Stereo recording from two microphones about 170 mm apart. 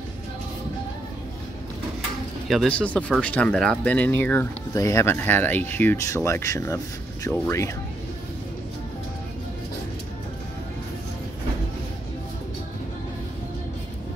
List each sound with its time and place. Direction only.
2.4 s speech: centre (ahead or behind); by 7.7 s 15° left (ahead or behind)